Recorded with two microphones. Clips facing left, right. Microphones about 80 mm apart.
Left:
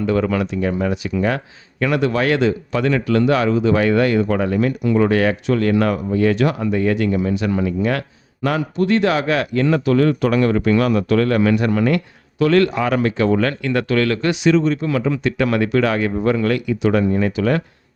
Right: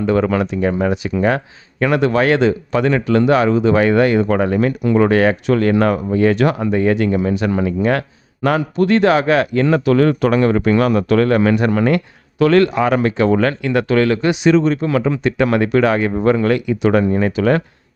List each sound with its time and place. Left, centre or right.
0.0 s speech: right
9.8 s speech: right
10.3 s speech: right
13.6 s speech: centre
14.4 s speech: right